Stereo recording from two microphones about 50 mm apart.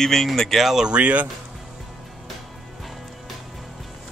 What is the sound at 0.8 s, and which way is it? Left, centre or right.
Speech, right.